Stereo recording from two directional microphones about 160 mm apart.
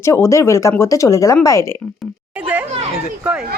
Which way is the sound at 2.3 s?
10° right (ahead or behind).